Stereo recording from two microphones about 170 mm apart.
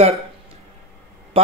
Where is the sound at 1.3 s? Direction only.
35° right (ahead or behind).